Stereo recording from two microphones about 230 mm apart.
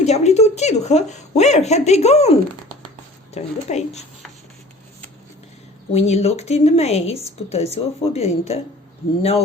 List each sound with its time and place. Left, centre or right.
0.0 s speech: left
5.9 s speech: left